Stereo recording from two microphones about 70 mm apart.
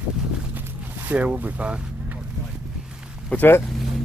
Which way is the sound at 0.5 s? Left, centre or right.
Right.